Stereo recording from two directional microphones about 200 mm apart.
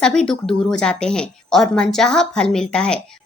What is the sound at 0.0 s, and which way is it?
A woman's voice, 5° left (ahead or behind).